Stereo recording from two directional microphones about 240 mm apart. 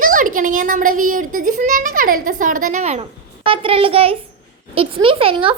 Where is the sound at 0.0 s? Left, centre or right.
Right.